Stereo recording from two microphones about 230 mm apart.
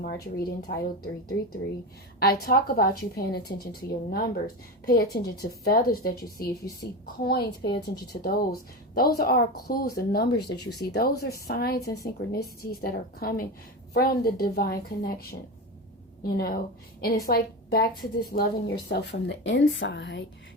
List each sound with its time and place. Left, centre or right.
0.0 s a woman's voice: left
2.1 s a woman's voice: left